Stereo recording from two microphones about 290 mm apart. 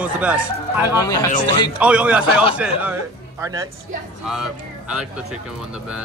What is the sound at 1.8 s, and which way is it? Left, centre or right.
Speech, centre.